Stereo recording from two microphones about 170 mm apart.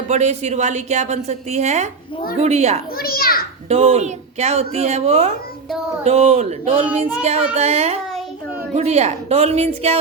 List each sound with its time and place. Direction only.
0.1 s a woman's voice: 40° right (ahead or behind)
3.0 s a child's voice: 60° left (ahead or behind)
3.7 s a woman's voice: 35° right (ahead or behind)